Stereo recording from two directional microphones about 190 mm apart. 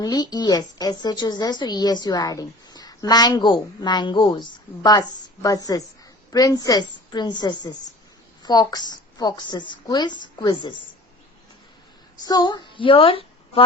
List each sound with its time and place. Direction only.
0.0 s a woman's voice: 20° left (ahead or behind)
12.2 s speech: 20° left (ahead or behind)